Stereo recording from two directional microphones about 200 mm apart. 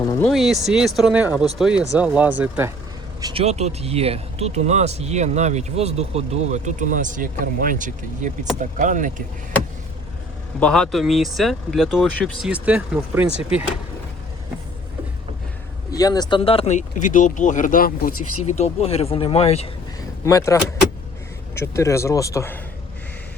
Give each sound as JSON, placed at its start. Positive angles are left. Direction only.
{"t": 0.2, "sound": "speech", "side_deg": 0}
{"t": 3.2, "sound": "speech", "side_deg": -20}
{"t": 3.4, "sound": "speech", "side_deg": -35}
{"t": 10.6, "sound": "speech", "side_deg": 5}
{"t": 15.9, "sound": "speech", "side_deg": 20}
{"t": 18.4, "sound": "speech", "side_deg": 35}
{"t": 20.2, "sound": "speech", "side_deg": 15}